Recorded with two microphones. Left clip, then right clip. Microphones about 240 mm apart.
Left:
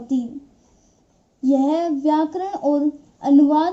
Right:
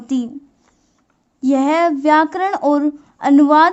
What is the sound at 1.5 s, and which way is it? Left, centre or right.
A woman's voice, right.